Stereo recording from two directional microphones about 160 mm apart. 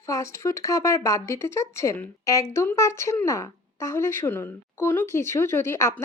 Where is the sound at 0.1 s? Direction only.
20° left (ahead or behind).